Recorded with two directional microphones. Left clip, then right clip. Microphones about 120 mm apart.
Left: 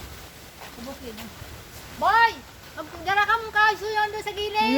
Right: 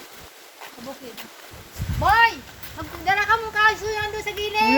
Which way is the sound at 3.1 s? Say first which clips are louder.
Right 2 dB; 15° left (ahead or behind).